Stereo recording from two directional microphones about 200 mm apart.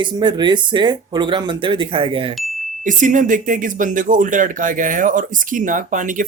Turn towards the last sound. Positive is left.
turn(degrees=-40)  # may be behind; listen again after turning